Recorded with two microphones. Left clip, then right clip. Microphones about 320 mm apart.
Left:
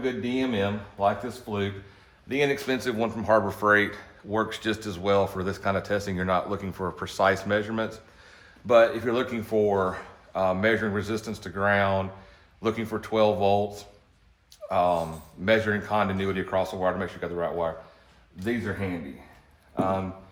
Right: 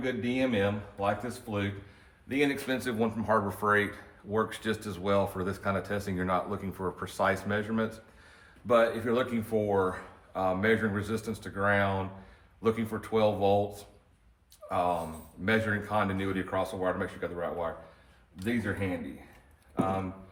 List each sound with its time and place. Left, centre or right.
0.0 s speech: centre
19.7 s speech: centre